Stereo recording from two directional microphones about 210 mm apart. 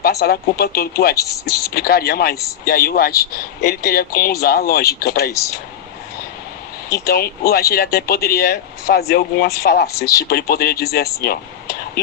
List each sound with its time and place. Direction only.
0.0 s speech: 50° left (ahead or behind)
1.2 s speech: 15° left (ahead or behind)
1.7 s speech: 45° left (ahead or behind)
7.0 s speech: 45° left (ahead or behind)